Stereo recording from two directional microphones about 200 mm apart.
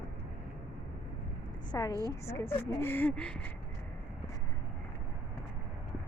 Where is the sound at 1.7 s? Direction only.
20° left (ahead or behind).